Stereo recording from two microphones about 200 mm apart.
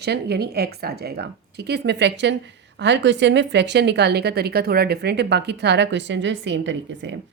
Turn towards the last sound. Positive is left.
turn(degrees=-65)  # may be behind; listen again after turning